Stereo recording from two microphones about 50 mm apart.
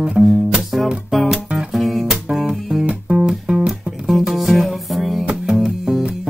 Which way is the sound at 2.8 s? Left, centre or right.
Centre.